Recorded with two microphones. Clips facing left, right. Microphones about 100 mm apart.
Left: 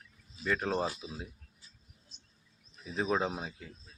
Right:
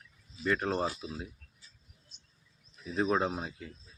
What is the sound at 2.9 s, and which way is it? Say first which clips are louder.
Speech: right 2 dB; centre (ahead or behind).